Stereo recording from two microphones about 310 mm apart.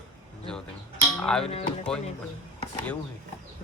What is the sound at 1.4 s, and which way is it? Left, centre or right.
Speech, centre.